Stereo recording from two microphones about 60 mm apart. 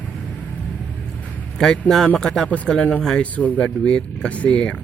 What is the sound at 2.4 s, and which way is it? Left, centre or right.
Speech, left.